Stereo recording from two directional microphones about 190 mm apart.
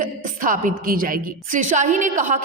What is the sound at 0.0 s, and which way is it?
A woman's voice, 45° right (ahead or behind).